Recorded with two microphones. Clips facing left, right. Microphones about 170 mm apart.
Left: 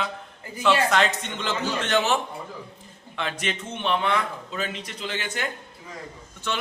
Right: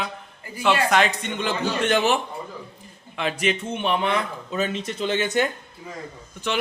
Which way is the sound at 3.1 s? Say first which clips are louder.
Right 5 dB; 10° right (ahead or behind).